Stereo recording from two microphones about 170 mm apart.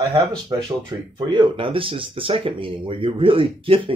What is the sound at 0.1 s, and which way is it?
Speech, 20° right (ahead or behind).